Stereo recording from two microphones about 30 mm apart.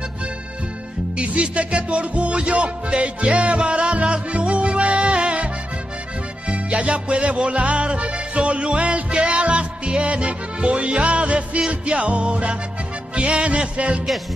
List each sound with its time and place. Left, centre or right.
1.2 s music: right
6.5 s music: right